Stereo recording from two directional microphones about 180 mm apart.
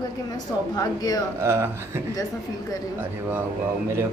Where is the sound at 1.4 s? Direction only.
15° right (ahead or behind).